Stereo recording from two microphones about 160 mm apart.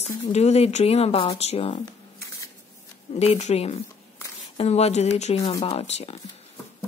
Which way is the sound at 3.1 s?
45° left (ahead or behind).